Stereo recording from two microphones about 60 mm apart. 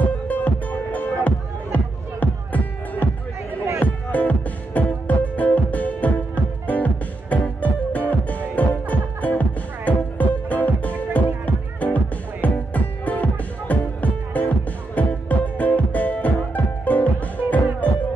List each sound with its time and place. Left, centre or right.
0.3 s music: left